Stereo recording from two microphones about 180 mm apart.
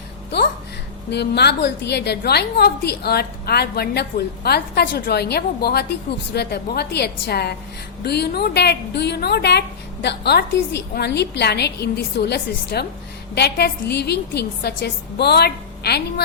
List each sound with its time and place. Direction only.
1.1 s a woman's voice: 65° left (ahead or behind)